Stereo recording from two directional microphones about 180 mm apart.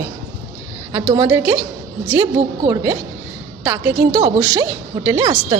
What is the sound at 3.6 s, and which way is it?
A woman's voice, 20° right (ahead or behind).